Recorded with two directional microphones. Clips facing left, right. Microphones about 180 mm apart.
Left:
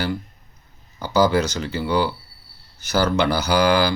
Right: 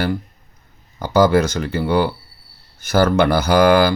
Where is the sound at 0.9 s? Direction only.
50° right (ahead or behind).